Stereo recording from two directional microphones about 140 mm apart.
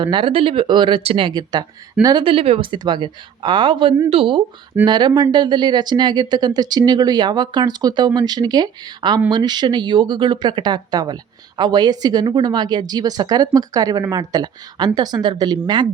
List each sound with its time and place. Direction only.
0.0 s a woman's voice: 35° right (ahead or behind)
2.2 s a woman's voice: 45° right (ahead or behind)